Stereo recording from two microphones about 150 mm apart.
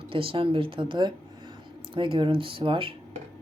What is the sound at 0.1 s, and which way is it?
Speech, 35° right (ahead or behind).